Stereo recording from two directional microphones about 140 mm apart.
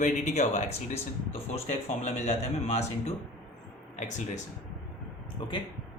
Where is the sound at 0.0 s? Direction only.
55° left (ahead or behind).